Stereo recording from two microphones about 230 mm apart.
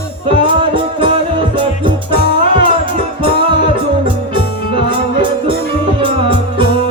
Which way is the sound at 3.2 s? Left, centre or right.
Right.